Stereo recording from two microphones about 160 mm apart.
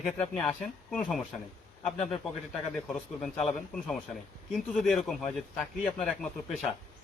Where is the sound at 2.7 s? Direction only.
5° left (ahead or behind).